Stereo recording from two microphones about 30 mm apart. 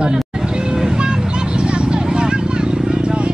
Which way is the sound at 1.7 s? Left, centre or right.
Right.